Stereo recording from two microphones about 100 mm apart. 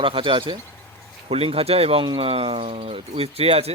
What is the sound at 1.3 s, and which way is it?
Speech, 75° right (ahead or behind).